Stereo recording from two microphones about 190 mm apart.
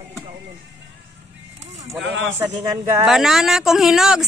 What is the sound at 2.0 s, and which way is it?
Speech, 75° right (ahead or behind).